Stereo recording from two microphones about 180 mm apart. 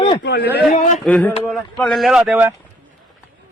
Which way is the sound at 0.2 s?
70° left (ahead or behind).